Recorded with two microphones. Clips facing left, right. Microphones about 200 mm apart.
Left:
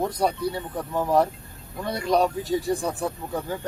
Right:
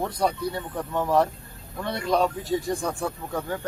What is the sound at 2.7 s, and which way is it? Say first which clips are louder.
Speech: left 2 dB; 35° left (ahead or behind).